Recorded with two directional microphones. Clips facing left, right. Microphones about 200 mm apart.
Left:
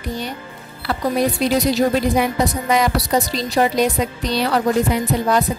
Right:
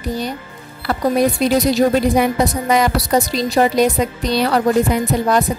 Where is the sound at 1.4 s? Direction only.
45° right (ahead or behind).